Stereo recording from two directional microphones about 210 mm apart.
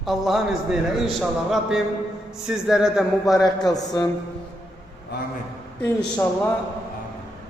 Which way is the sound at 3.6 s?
20° left (ahead or behind).